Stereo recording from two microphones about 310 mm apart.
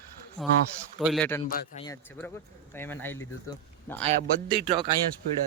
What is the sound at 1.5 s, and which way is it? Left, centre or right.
Speech, left.